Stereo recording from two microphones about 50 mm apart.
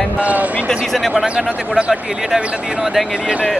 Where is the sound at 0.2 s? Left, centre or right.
Right.